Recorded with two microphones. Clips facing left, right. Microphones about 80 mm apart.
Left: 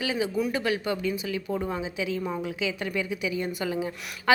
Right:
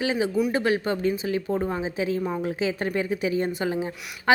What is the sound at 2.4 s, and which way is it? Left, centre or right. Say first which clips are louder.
A woman's voice: right 4 dB; right.